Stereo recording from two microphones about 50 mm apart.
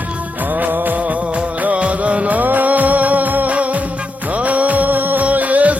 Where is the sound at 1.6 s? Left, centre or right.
Right.